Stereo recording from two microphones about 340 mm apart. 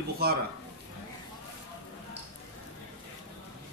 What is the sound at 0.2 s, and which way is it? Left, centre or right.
Speech, right.